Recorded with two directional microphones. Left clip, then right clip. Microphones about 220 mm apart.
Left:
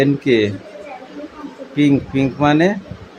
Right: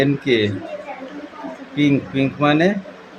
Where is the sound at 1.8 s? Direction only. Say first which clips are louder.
Left 2 dB; 15° left (ahead or behind).